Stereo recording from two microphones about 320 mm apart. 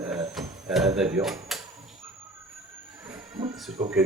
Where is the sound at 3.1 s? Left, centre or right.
Centre.